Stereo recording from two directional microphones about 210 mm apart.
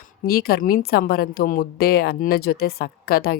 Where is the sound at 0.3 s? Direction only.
45° left (ahead or behind).